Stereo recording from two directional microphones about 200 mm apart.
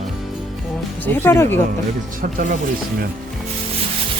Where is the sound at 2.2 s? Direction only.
40° right (ahead or behind).